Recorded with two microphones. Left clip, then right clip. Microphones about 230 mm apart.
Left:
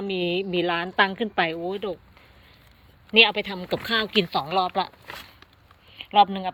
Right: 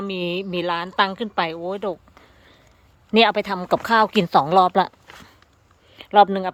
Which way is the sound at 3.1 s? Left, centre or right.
Right.